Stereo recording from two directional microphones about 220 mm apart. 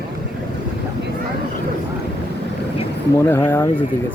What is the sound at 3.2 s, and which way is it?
Speech, 10° left (ahead or behind).